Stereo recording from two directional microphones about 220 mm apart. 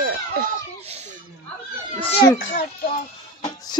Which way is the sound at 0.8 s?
30° right (ahead or behind).